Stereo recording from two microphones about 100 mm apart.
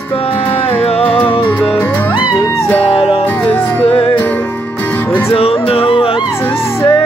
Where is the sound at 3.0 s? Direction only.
75° left (ahead or behind).